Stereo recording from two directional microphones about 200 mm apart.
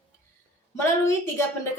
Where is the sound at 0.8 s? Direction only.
10° left (ahead or behind).